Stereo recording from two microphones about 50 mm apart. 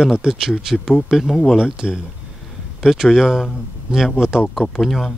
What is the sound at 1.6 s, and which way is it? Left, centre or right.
Speech, centre.